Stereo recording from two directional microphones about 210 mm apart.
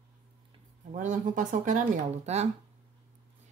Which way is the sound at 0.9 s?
35° right (ahead or behind).